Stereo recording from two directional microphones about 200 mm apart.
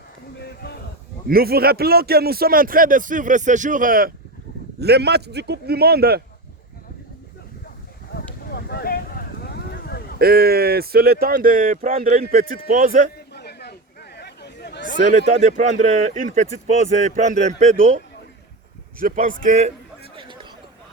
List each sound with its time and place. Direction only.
1.3 s speech: 50° right (ahead or behind)
4.8 s a man's voice: 55° right (ahead or behind)
8.4 s a sound: 55° left (ahead or behind)
10.2 s speech: 50° right (ahead or behind)
13.1 s chatter: 55° left (ahead or behind)
15.4 s speech: 35° right (ahead or behind)
18.9 s speech: 40° right (ahead or behind)
20.1 s a sound: 25° right (ahead or behind)